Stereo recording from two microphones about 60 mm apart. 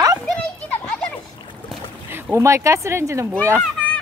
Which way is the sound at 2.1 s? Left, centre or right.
Right.